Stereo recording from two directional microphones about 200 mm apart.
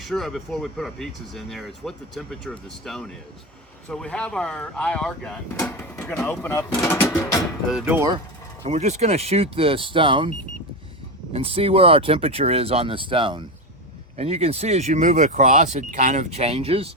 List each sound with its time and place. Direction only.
0.0 s speech: centre (ahead or behind)
7.7 s speech: 5° right (ahead or behind)
8.6 s speech: 35° right (ahead or behind)
11.3 s speech: 30° right (ahead or behind)